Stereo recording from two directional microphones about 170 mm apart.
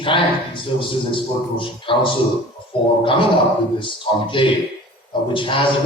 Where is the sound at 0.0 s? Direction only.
30° left (ahead or behind).